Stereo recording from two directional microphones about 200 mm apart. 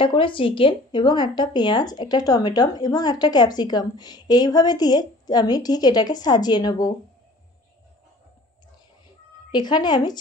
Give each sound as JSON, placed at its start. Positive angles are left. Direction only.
{"t": 0.0, "sound": "speech", "side_deg": 25}
{"t": 9.5, "sound": "speech", "side_deg": 20}